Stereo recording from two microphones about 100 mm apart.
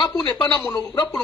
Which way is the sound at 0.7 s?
40° left (ahead or behind).